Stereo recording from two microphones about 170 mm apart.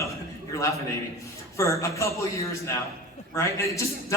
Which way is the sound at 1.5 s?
20° left (ahead or behind).